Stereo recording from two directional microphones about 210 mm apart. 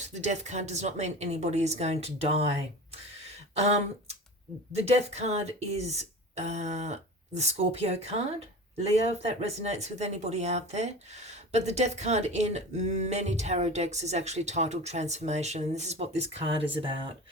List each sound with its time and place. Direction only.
0.1 s speech: 35° right (ahead or behind)
4.9 s speech: 30° right (ahead or behind)